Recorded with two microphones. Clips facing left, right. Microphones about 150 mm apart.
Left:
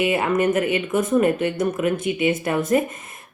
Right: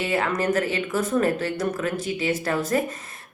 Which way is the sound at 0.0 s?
20° left (ahead or behind).